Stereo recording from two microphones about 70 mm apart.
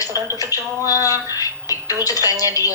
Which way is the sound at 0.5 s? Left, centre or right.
Left.